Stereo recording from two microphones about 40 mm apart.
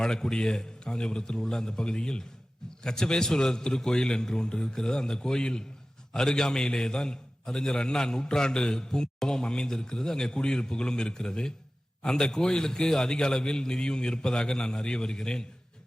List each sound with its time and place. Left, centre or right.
0.0 s a man's voice: centre